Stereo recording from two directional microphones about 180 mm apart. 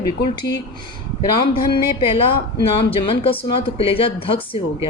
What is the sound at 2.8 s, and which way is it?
Speech, 30° left (ahead or behind).